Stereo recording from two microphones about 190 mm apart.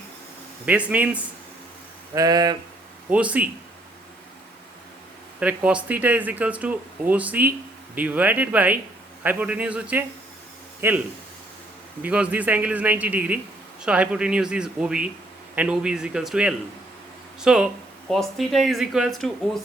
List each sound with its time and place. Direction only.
0.6 s speech: 5° right (ahead or behind)
2.1 s speech: 20° right (ahead or behind)
3.1 s speech: 5° right (ahead or behind)
5.4 s a man's voice: 5° right (ahead or behind)
12.0 s speech: 10° right (ahead or behind)